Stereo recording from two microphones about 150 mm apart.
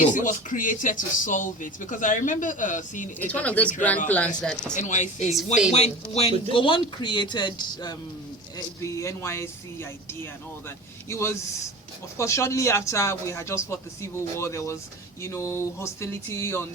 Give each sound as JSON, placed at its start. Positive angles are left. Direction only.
{"t": 0.0, "sound": "speech", "side_deg": 60}
{"t": 3.2, "sound": "speech", "side_deg": 10}
{"t": 4.7, "sound": "speech", "side_deg": 55}
{"t": 5.7, "sound": "speech", "side_deg": 45}